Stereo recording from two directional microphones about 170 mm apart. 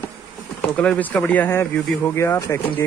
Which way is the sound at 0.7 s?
10° left (ahead or behind).